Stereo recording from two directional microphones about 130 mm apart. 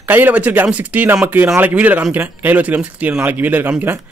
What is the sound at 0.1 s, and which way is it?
Speech, 10° right (ahead or behind).